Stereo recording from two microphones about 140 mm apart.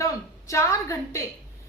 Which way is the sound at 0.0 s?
20° left (ahead or behind).